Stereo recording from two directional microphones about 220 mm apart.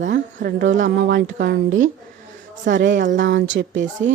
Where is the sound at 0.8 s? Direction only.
50° right (ahead or behind).